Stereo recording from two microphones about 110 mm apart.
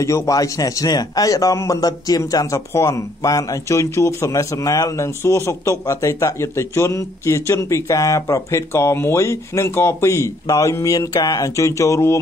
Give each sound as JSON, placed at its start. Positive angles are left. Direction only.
{"t": 0.0, "sound": "a man's voice", "side_deg": 25}